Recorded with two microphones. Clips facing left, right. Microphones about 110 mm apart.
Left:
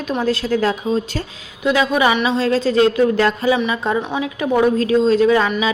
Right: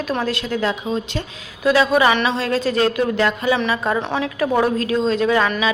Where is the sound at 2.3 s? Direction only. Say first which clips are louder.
Left 4 dB; 30° left (ahead or behind).